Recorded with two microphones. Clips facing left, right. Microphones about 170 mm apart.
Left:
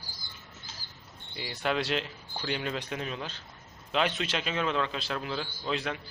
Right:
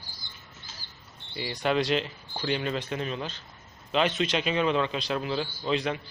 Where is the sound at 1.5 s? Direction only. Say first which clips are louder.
Right 4 dB; 5° left (ahead or behind).